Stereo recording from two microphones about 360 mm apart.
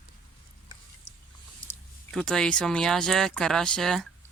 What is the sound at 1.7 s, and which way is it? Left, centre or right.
Speech, centre.